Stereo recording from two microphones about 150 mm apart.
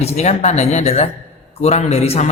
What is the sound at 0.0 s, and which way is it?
A man's voice, 45° left (ahead or behind).